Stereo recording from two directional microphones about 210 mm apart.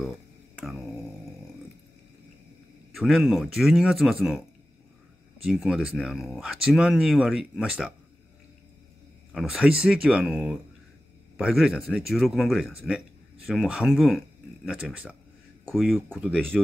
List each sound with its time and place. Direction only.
0.6 s a sound: centre (ahead or behind)
2.9 s speech: centre (ahead or behind)
5.5 s speech: 5° right (ahead or behind)
9.3 s speech: centre (ahead or behind)